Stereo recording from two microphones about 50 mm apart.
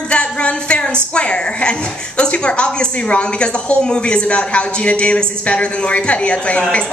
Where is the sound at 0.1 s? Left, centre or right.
Left.